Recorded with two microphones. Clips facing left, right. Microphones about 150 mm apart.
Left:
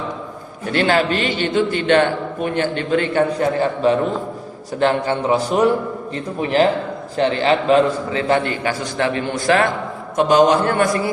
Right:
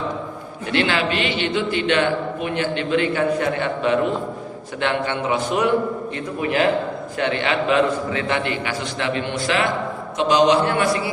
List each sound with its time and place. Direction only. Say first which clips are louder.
0.7 s a man's voice: left 4 dB; 45° left (ahead or behind)
7.2 s a man's voice: left 5 dB; 35° left (ahead or behind)